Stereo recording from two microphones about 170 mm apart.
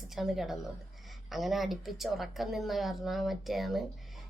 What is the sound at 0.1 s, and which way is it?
Speech, centre (ahead or behind).